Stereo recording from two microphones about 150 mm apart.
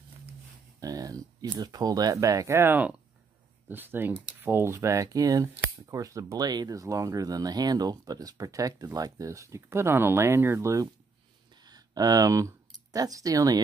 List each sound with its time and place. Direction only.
0.7 s speech: 25° right (ahead or behind)